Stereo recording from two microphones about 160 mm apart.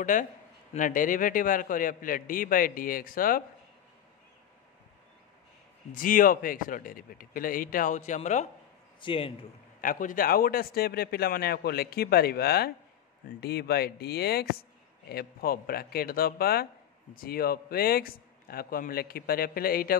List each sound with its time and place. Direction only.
0.0 s a man's voice: 55° left (ahead or behind)
5.9 s a man's voice: 60° left (ahead or behind)
9.0 s a man's voice: 35° left (ahead or behind)
9.8 s a man's voice: 55° left (ahead or behind)